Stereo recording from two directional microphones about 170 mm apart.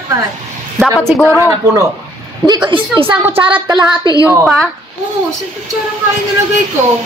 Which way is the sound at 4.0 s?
20° left (ahead or behind).